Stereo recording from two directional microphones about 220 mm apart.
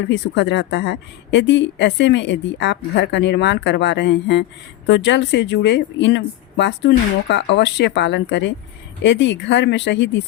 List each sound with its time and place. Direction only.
0.1 s speech: 55° left (ahead or behind)